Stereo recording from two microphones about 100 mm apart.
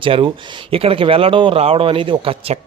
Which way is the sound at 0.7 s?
70° right (ahead or behind).